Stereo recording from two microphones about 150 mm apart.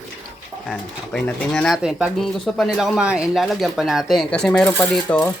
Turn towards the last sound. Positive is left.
turn(degrees=10)  # may be behind; listen again after turning